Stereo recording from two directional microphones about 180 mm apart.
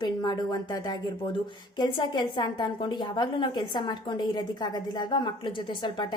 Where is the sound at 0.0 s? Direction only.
25° left (ahead or behind).